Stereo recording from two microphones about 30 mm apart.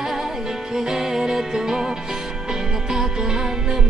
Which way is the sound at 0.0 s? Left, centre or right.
Centre.